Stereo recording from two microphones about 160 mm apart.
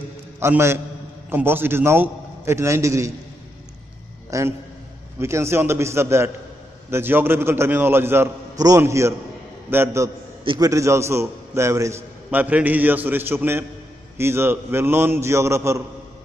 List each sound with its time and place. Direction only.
0.4 s a man's voice: 15° right (ahead or behind)
4.3 s a man's voice: 20° right (ahead or behind)
10.4 s a man's voice: 30° right (ahead or behind)
10.7 s a man's voice: 20° right (ahead or behind)